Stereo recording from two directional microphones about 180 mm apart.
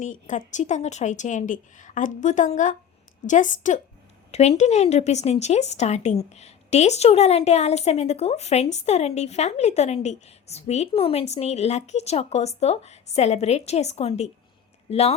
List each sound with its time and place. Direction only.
0.0 s a woman's voice: 45° left (ahead or behind)